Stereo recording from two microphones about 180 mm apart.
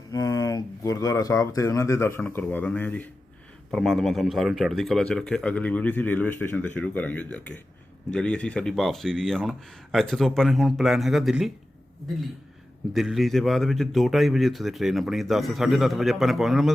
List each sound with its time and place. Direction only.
0.1 s speech: 20° left (ahead or behind); by 11.5 s centre (ahead or behind)
12.9 s speech: centre (ahead or behind)